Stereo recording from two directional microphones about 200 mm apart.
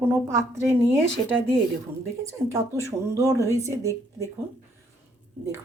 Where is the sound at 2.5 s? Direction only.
15° right (ahead or behind).